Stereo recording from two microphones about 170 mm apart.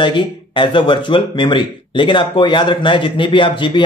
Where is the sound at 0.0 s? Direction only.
25° left (ahead or behind).